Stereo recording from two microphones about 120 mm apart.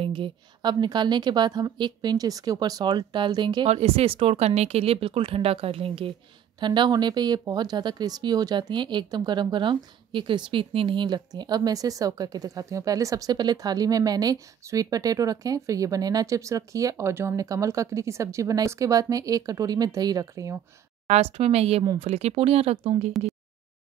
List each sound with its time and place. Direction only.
0.0 s speech: 45° right (ahead or behind)
3.6 s speech: 60° right (ahead or behind)
6.6 s speech: 40° right (ahead or behind)
21.1 s speech: 60° right (ahead or behind)